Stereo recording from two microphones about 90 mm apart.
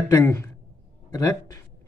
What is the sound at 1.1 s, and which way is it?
Speech, 45° left (ahead or behind).